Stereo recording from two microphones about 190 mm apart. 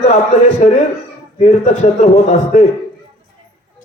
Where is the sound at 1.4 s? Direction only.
40° left (ahead or behind).